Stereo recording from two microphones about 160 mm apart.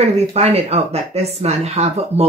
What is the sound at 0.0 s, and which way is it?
Speech, 40° right (ahead or behind).